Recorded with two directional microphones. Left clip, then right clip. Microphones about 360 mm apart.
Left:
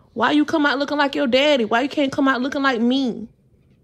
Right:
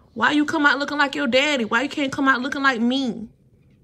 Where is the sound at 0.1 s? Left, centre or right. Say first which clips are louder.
Left 1 dB; centre.